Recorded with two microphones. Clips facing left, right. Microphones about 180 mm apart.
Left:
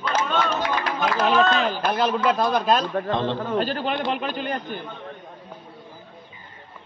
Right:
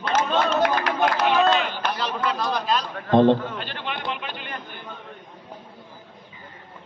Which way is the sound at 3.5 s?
40° left (ahead or behind).